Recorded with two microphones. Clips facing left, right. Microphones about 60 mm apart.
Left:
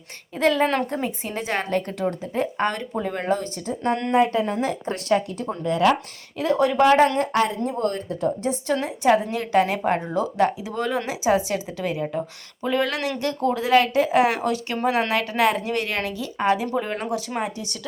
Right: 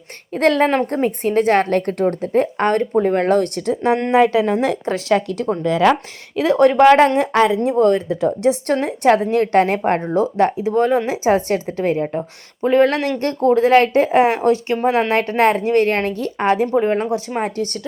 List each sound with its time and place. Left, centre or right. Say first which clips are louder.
0.3 s speech: right 5 dB; right
3.2 s speech: right 8 dB; right
4.1 s a woman's voice: right 5 dB; right
6.3 s speech: right 7 dB; right
7.2 s a woman's voice: right 6 dB; right
8.7 s speech: right 2 dB; right
16.7 s speech: right 8 dB; right
17.4 s speech: right 7 dB; right